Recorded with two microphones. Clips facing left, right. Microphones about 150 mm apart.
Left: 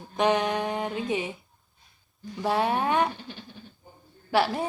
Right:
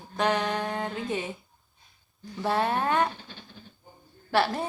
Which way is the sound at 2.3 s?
10° left (ahead or behind).